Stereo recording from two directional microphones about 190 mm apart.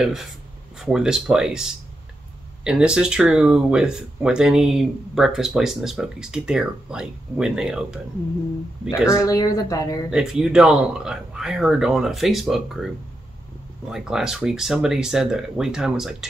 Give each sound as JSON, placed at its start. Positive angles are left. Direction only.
{"t": 0.0, "sound": "speech", "side_deg": 0}
{"t": 9.1, "sound": "a woman's voice", "side_deg": 20}
{"t": 10.0, "sound": "speech", "side_deg": -5}